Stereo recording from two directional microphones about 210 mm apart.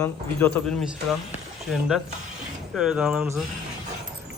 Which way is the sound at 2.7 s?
Centre (ahead or behind).